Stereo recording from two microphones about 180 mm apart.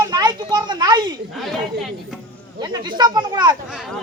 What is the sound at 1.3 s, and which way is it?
Speech, centre (ahead or behind).